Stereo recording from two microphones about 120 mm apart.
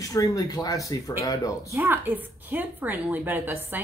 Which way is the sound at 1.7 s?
15° right (ahead or behind).